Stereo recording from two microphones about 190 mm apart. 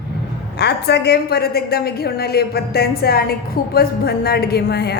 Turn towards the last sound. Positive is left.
turn(degrees=55)  # may be behind; listen again after turning